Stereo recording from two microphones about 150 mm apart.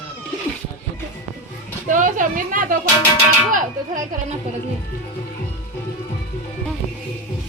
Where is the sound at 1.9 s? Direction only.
60° right (ahead or behind).